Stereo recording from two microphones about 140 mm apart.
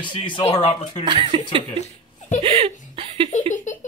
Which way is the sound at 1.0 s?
35° right (ahead or behind).